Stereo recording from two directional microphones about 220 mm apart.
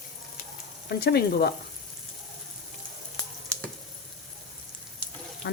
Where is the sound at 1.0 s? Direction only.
45° left (ahead or behind).